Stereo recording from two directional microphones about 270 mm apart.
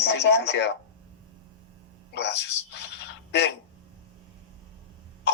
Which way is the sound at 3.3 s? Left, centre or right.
Left.